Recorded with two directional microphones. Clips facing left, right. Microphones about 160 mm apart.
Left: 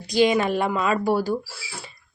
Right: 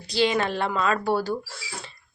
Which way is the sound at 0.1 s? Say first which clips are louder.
Left 4 dB; 15° left (ahead or behind).